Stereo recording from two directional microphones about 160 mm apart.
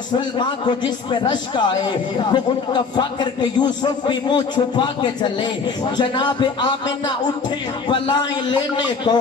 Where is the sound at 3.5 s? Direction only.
25° left (ahead or behind).